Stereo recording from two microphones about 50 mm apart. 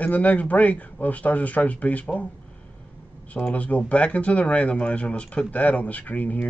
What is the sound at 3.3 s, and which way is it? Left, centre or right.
Speech, left.